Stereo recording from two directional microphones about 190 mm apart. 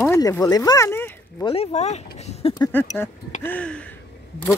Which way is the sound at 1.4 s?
35° left (ahead or behind).